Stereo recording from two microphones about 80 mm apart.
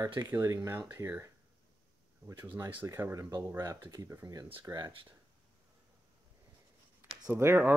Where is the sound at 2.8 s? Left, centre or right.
Right.